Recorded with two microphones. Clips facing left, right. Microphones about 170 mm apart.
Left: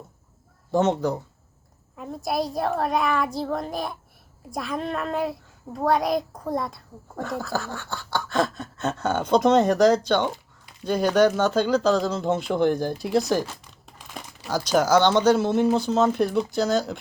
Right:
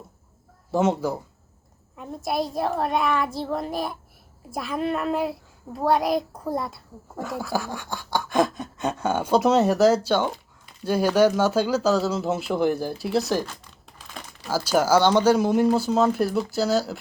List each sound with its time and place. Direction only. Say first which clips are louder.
0.7 s a child's voice: left 1 dB; 5° right (ahead or behind)